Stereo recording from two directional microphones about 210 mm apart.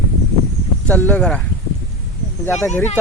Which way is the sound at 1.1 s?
5° left (ahead or behind).